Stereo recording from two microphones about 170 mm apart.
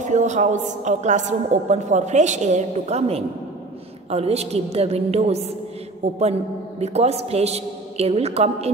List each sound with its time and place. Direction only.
0.0 s a woman's voice: 45° right (ahead or behind)